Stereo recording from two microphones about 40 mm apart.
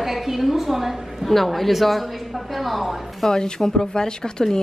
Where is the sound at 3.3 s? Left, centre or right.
Centre.